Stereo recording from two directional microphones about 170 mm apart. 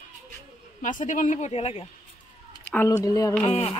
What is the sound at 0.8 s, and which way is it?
Speech, 50° left (ahead or behind).